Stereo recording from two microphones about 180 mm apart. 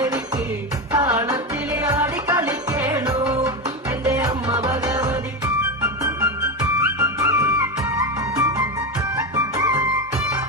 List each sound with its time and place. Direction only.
1.0 s music: 15° right (ahead or behind)
4.0 s music: 20° right (ahead or behind)